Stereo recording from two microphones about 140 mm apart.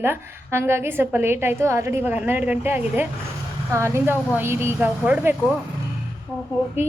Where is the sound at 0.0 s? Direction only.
15° right (ahead or behind).